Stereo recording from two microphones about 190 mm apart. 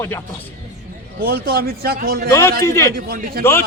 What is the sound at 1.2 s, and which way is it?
Speech, 55° right (ahead or behind).